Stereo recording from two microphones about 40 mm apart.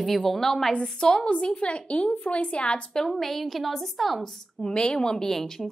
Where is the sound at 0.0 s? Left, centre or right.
Centre.